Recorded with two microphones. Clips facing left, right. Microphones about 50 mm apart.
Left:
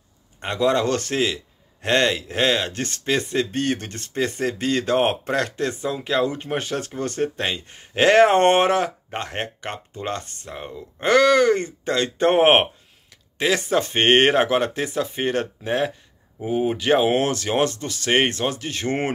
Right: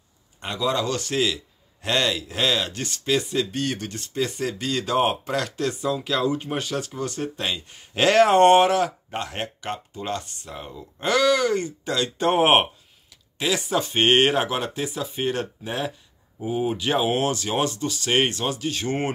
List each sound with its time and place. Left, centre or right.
0.4 s speech: left